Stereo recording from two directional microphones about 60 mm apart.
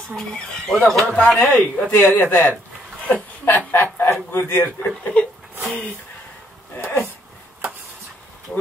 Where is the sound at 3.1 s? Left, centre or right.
Left.